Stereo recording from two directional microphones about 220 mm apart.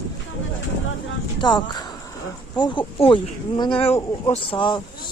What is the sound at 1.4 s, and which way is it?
Speech, 20° left (ahead or behind).